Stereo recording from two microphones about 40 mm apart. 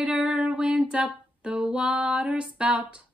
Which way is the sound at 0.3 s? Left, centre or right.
Right.